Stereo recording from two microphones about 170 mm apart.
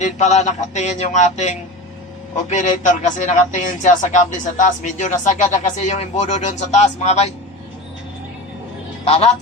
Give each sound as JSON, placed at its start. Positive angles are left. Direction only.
{"t": 0.0, "sound": "a man's voice", "side_deg": 40}
{"t": 9.0, "sound": "a man's voice", "side_deg": 35}